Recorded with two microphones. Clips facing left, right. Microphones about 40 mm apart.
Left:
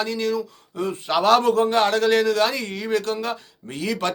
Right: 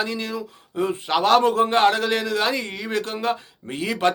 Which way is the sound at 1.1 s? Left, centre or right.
Centre.